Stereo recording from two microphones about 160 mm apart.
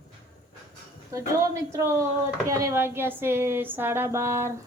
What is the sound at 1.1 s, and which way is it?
A woman's voice, 20° right (ahead or behind).